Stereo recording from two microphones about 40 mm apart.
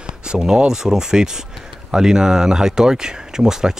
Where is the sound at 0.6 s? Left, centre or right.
Centre.